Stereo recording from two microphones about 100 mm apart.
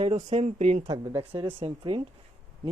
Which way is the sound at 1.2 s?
75° right (ahead or behind).